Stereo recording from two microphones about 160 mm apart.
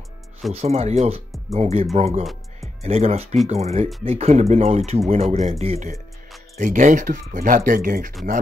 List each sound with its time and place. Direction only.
0.5 s speech: 40° right (ahead or behind)
6.6 s speech: 50° right (ahead or behind)